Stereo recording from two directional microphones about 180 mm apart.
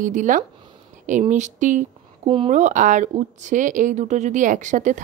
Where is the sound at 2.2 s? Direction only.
30° right (ahead or behind).